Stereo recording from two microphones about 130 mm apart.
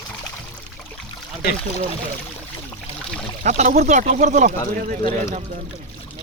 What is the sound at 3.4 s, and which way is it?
Speech, 70° right (ahead or behind).